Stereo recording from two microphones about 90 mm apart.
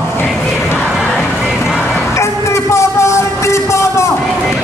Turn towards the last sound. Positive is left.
turn(degrees=35)  # may be behind; listen again after turning